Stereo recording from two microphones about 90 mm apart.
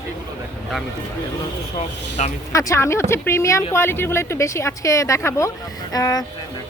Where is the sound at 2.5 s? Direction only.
35° left (ahead or behind).